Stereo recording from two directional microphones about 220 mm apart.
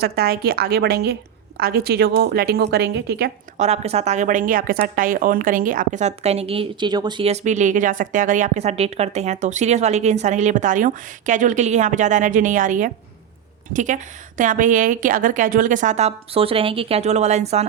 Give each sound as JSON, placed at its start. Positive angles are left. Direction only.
{"t": 0.0, "sound": "a woman's voice", "side_deg": -45}
{"t": 3.6, "sound": "a woman's voice", "side_deg": -30}